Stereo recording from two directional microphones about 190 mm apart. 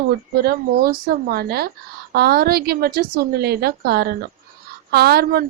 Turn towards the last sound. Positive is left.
turn(degrees=-55)  # may be behind; listen again after turning